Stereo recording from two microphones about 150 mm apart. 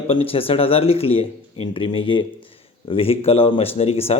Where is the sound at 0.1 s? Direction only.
40° left (ahead or behind).